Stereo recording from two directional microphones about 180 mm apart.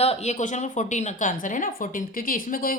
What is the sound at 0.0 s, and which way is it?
A woman's voice, 35° left (ahead or behind).